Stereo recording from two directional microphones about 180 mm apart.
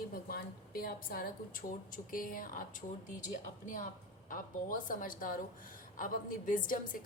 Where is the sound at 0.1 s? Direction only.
55° left (ahead or behind).